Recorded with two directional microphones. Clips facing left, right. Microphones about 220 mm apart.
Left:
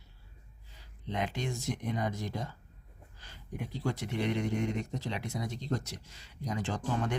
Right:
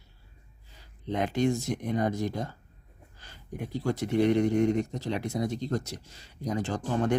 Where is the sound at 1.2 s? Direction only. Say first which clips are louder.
Right 10 dB; 45° right (ahead or behind).